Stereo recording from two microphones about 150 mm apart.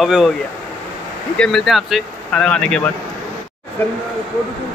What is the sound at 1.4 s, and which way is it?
Speech, 5° left (ahead or behind).